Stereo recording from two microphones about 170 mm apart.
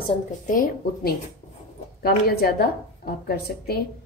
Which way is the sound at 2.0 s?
65° left (ahead or behind).